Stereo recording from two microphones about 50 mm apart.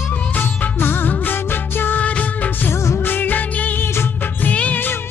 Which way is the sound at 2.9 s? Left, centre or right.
Left.